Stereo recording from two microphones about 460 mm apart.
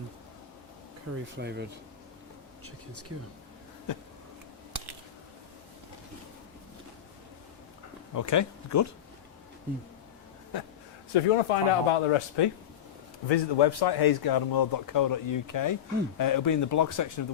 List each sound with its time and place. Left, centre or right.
1.4 s speech: right
3.9 s a man's voice: left
8.1 s speech: left
11.1 s speech: left
13.2 s a man's voice: left